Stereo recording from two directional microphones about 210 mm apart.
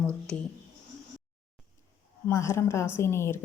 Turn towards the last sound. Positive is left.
turn(degrees=10)  # may be behind; listen again after turning